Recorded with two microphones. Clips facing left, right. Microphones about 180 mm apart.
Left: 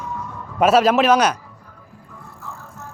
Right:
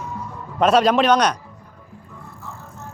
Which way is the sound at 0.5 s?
5° left (ahead or behind).